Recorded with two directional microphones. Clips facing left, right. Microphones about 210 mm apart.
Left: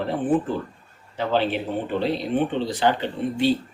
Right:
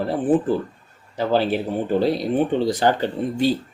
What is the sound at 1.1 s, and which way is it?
Speech, 40° right (ahead or behind).